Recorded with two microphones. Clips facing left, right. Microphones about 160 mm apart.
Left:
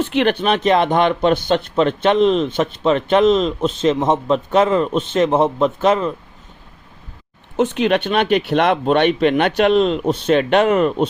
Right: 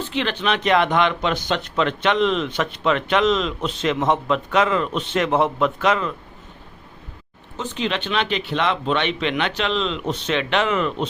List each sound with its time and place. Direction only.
0.0 s speech: 55° left (ahead or behind)
0.7 s speech: 30° left (ahead or behind)
0.9 s speech: 45° left (ahead or behind)
5.1 s a man's voice: 25° left (ahead or behind)
7.5 s speech: 55° left (ahead or behind)